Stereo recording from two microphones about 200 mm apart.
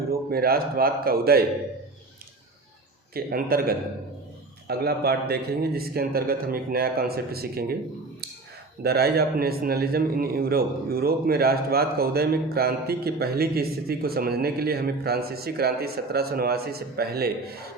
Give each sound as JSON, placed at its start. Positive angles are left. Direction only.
{"t": 0.1, "sound": "a man's voice", "side_deg": -50}
{"t": 3.2, "sound": "a man's voice", "side_deg": -50}
{"t": 8.8, "sound": "a man's voice", "side_deg": -50}